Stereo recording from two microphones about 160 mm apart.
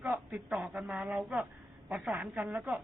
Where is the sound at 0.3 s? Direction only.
5° right (ahead or behind).